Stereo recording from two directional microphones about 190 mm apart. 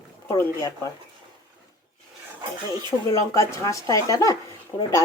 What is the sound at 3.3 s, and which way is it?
Speech, 15° left (ahead or behind).